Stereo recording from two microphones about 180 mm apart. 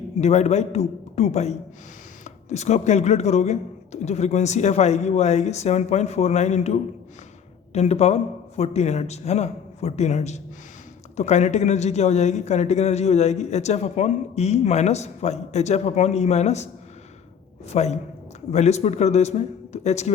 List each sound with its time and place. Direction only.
0.2 s a man's voice: 35° left (ahead or behind)
17.7 s a man's voice: 35° left (ahead or behind)